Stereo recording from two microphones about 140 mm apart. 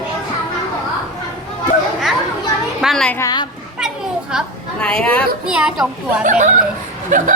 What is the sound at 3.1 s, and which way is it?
Speech, 25° left (ahead or behind).